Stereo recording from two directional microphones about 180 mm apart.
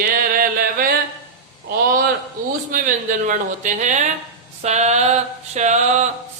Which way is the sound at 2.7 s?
50° right (ahead or behind).